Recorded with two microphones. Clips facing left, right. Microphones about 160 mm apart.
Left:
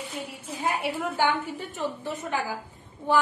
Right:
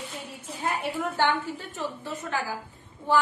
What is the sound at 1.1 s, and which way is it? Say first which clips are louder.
A woman's voice: even; 15° left (ahead or behind).